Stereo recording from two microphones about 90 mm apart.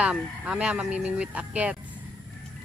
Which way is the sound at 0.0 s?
10° right (ahead or behind).